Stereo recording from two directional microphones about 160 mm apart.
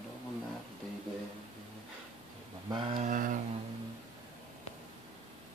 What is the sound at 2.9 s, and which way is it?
Mantra, 55° right (ahead or behind).